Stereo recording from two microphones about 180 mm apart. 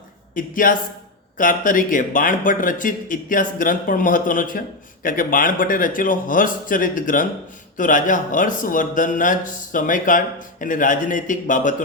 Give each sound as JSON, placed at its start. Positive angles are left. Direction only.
{"t": 0.3, "sound": "speech", "side_deg": 50}